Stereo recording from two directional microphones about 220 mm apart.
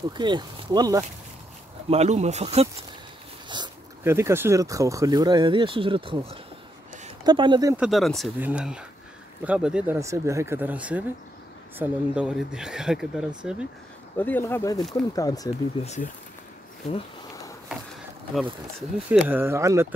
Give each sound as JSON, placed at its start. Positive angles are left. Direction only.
{"t": 0.2, "sound": "speech", "side_deg": -20}
{"t": 1.9, "sound": "speech", "side_deg": -30}
{"t": 7.7, "sound": "speech", "side_deg": 0}
{"t": 14.1, "sound": "speech", "side_deg": 10}
{"t": 15.8, "sound": "speech", "side_deg": 30}
{"t": 18.3, "sound": "speech", "side_deg": -5}